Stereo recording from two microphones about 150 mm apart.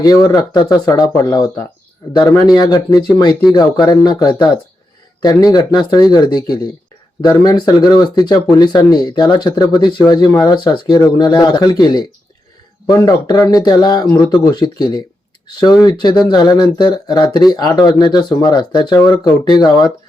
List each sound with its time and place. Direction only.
0.0 s speech: 25° left (ahead or behind)